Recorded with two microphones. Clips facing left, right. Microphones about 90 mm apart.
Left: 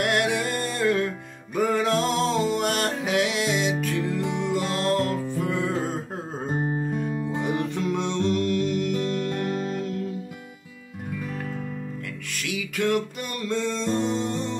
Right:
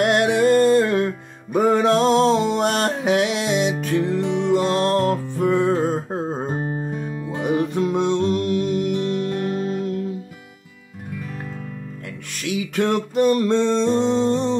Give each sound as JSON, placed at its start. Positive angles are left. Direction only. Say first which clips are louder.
{"t": 0.0, "sound": "music", "louder": "right 7 dB", "side_deg": -25}
{"t": 6.5, "sound": "music", "louder": "right 1 dB", "side_deg": -5}
{"t": 12.4, "sound": "music", "louder": "right 5 dB", "side_deg": -30}